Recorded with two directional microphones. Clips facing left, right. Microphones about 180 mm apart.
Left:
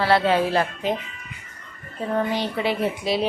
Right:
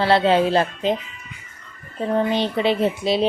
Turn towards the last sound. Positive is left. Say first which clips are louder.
# right 3 dB
turn(degrees=-25)  # may be behind; listen again after turning